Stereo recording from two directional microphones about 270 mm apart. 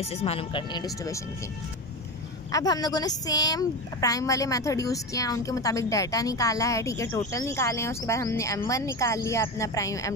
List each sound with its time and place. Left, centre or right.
0.0 s speech: left
2.5 s speech: centre